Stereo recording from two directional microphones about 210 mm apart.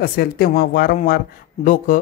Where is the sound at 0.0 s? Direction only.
45° left (ahead or behind).